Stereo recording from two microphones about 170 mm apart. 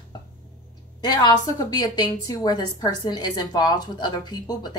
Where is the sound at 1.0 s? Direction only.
25° left (ahead or behind).